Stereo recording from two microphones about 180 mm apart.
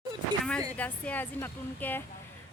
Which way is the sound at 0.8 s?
10° left (ahead or behind).